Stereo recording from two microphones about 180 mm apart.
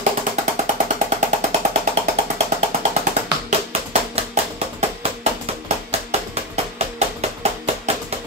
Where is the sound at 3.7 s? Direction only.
35° right (ahead or behind).